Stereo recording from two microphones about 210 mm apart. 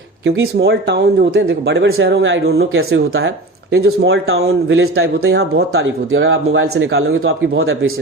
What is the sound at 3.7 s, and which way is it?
Speech, 50° right (ahead or behind).